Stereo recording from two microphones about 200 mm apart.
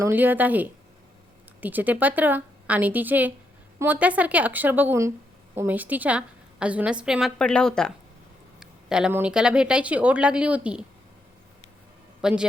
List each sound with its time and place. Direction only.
0.0 s a woman's voice: 10° right (ahead or behind)
12.2 s a woman's voice: 5° right (ahead or behind)